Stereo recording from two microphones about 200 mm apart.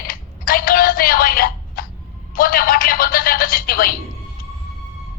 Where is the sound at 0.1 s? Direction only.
45° left (ahead or behind).